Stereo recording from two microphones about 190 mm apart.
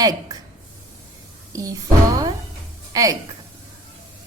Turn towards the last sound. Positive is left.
turn(degrees=-20)  # may be behind; listen again after turning